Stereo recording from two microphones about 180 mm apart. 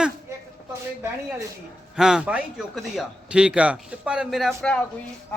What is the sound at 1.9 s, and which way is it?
A man's voice, 5° right (ahead or behind).